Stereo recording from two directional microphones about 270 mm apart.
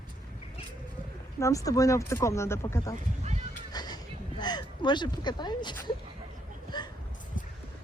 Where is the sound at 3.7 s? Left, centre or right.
Centre.